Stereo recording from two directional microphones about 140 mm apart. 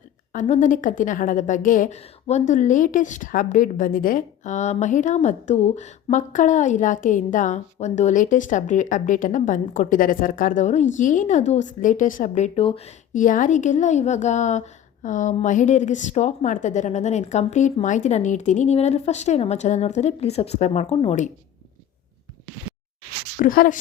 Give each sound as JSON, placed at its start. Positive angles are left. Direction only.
{"t": 0.3, "sound": "a woman's voice", "side_deg": 60}
{"t": 2.0, "sound": "a woman's voice", "side_deg": 50}
{"t": 12.6, "sound": "speech", "side_deg": 45}
{"t": 13.1, "sound": "a woman's voice", "side_deg": 70}
{"t": 20.9, "sound": "speech", "side_deg": 35}
{"t": 23.4, "sound": "speech", "side_deg": 80}